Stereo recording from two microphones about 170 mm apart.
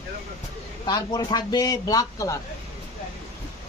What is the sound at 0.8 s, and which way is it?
A man's voice, 25° left (ahead or behind).